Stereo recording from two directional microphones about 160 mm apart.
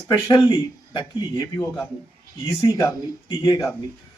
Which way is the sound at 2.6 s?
25° left (ahead or behind).